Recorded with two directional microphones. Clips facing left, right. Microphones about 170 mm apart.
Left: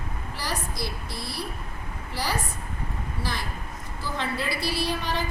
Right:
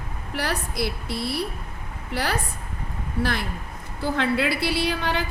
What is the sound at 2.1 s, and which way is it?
Speech, 60° right (ahead or behind).